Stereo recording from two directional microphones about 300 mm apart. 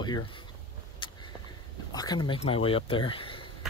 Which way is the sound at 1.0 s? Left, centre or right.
Centre.